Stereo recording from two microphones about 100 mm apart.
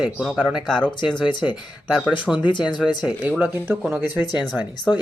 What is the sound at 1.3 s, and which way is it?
Speech, 50° left (ahead or behind).